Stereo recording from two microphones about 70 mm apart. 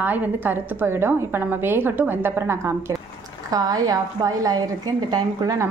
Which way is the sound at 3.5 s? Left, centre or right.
Right.